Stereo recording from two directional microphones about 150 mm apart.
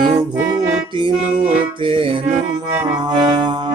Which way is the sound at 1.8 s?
35° right (ahead or behind).